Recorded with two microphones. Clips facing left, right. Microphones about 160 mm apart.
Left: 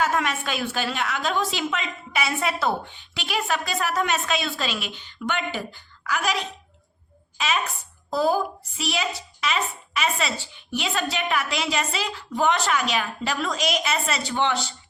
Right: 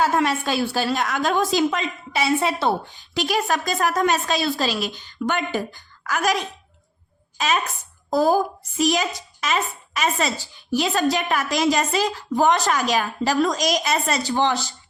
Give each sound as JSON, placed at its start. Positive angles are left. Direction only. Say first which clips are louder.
{"t": 0.0, "sound": "a woman's voice", "louder": "right 4 dB", "side_deg": -35}